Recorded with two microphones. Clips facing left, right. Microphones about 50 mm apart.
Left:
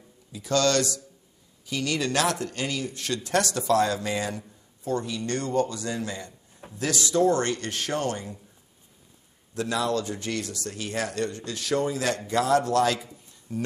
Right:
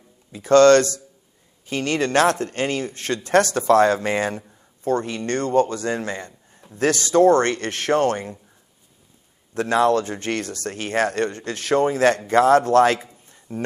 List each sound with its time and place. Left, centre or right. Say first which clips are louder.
0.3 s speech: right 11 dB; right
9.5 s speech: right 8 dB; right